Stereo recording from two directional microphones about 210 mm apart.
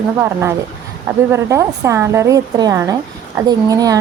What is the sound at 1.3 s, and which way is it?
A woman's voice, 15° right (ahead or behind).